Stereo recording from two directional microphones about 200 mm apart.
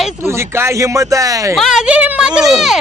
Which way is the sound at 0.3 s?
15° right (ahead or behind).